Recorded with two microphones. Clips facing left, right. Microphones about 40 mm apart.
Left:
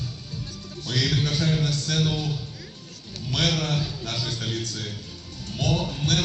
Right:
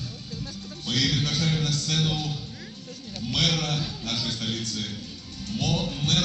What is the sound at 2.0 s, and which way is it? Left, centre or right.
Music, left.